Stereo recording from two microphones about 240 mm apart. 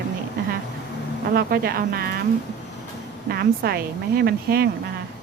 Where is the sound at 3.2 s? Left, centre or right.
Right.